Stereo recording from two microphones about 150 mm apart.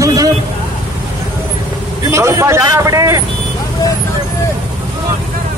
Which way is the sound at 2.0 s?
20° right (ahead or behind).